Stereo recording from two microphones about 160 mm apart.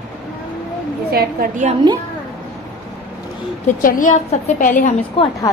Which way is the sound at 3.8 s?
55° left (ahead or behind).